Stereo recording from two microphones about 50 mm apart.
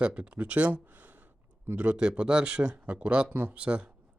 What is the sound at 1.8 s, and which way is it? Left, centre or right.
Speech, right.